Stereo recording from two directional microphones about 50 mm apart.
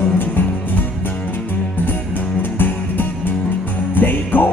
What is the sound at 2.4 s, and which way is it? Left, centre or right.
Music, left.